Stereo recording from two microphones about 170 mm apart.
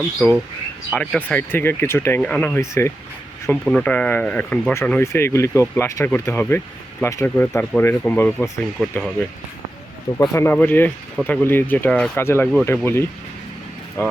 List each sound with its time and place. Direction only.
0.2 s speech: 5° left (ahead or behind)
8.8 s speech: centre (ahead or behind)
10.2 s speech: 15° left (ahead or behind)